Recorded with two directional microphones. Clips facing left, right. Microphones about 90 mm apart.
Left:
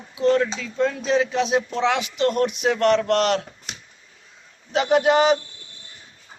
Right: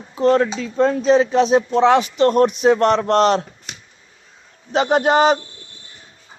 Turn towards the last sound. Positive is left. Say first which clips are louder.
# right 2 dB
turn(degrees=-40)  # may be behind; listen again after turning